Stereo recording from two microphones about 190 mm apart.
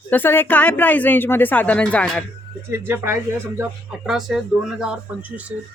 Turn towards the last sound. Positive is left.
turn(degrees=-5)  # may be behind; listen again after turning